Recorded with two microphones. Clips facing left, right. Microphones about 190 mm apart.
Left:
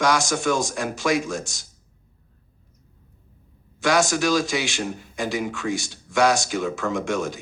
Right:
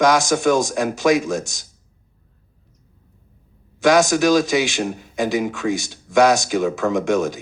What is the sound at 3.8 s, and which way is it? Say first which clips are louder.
Speech: right 6 dB; 20° right (ahead or behind).